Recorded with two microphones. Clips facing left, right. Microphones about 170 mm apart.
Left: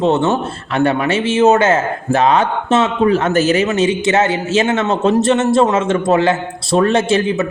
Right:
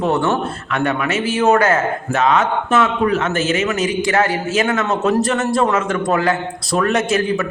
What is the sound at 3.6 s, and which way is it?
A man's voice, 25° left (ahead or behind).